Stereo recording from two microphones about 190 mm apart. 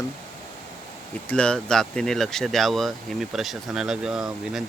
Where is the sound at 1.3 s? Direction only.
5° left (ahead or behind).